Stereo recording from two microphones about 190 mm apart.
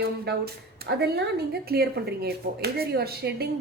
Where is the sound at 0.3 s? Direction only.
60° right (ahead or behind).